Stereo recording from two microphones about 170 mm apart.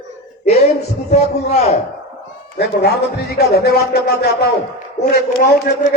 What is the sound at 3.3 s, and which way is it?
A man's voice, 70° left (ahead or behind).